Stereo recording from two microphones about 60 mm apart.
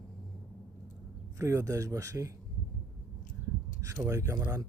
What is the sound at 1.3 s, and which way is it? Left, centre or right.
Speech, right.